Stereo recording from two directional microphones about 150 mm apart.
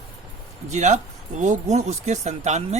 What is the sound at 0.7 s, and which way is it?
Speech, 50° right (ahead or behind).